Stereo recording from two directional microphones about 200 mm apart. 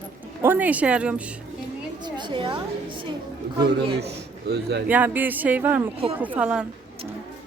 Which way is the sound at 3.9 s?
55° right (ahead or behind).